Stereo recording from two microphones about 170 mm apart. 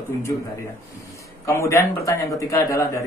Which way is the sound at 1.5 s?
15° left (ahead or behind).